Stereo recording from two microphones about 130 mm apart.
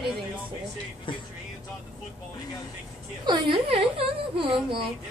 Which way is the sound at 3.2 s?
40° right (ahead or behind).